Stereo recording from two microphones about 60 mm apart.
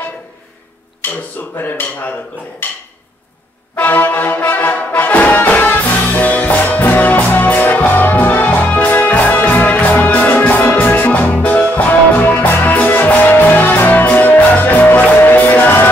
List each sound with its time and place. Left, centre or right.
1.0 s a sound: left
1.6 s speech: left
3.7 s brass instrument: left